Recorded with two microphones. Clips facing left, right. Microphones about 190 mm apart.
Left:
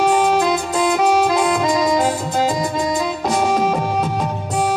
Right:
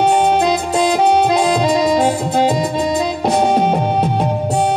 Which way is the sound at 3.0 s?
30° right (ahead or behind).